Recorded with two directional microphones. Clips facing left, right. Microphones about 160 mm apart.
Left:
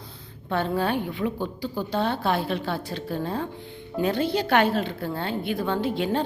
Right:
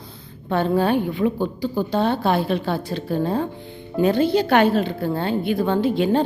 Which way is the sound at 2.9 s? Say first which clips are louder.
Right 5 dB; 30° right (ahead or behind).